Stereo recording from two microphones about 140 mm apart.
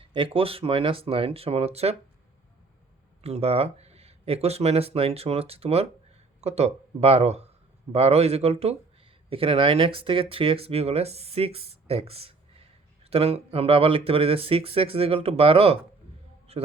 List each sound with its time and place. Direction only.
0.0 s speech: 40° right (ahead or behind)
3.2 s a man's voice: 50° right (ahead or behind)